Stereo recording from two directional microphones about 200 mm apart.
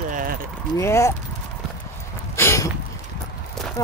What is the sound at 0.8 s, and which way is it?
Speech, 15° left (ahead or behind).